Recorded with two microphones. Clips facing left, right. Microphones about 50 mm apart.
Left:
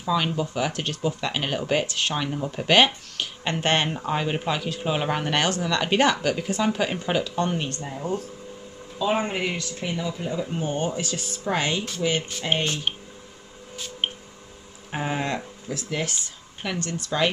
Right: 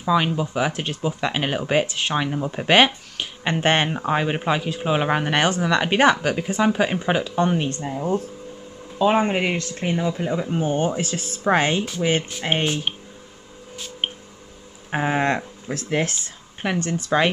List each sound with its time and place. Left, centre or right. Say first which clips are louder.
0.0 s speech: right 4 dB; centre
8.9 s speech: right 6 dB; right
10.5 s speech: right 6 dB; right
12.6 s speech: right 3 dB; centre
14.9 s a sound: right 5 dB; right
15.1 s speech: right 6 dB; right
16.6 s speech: right 6 dB; right